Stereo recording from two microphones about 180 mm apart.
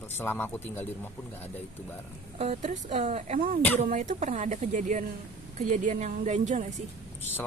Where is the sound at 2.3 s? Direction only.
35° right (ahead or behind).